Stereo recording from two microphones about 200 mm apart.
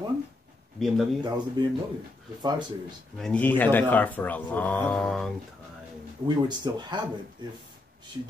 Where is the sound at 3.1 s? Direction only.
5° left (ahead or behind).